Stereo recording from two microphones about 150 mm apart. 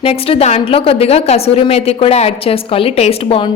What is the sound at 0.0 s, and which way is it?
A woman's voice, 40° left (ahead or behind).